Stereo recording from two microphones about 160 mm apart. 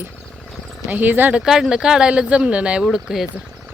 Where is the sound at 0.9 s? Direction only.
10° right (ahead or behind).